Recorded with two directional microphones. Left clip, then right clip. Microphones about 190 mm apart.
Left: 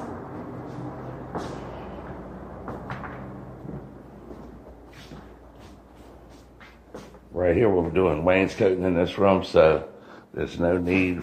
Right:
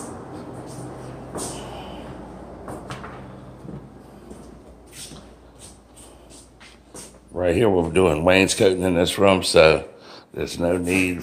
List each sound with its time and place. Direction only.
7.3 s speech: 25° right (ahead or behind)